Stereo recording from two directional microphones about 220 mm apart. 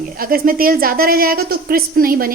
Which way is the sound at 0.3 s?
40° right (ahead or behind).